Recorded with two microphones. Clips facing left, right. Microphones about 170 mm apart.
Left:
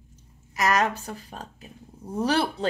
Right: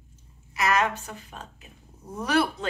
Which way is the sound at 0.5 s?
40° left (ahead or behind).